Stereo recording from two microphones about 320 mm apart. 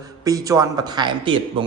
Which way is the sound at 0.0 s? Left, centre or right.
Centre.